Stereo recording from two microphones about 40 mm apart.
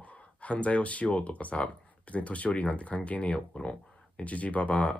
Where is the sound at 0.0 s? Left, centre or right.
Left.